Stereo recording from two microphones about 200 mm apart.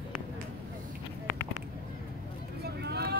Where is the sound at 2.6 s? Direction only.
55° right (ahead or behind).